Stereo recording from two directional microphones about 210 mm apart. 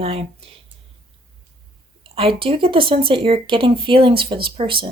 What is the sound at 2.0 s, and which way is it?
Speech, 25° right (ahead or behind).